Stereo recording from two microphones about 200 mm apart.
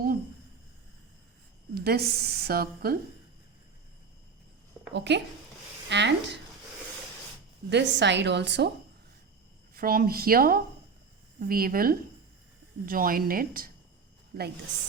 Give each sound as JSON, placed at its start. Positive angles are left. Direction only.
{"t": 1.7, "sound": "a woman's voice", "side_deg": -50}
{"t": 4.9, "sound": "a woman's voice", "side_deg": -60}
{"t": 7.7, "sound": "a woman's voice", "side_deg": -60}
{"t": 9.7, "sound": "a woman's voice", "side_deg": -45}